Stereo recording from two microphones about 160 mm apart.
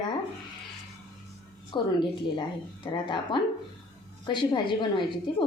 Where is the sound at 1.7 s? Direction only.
30° left (ahead or behind).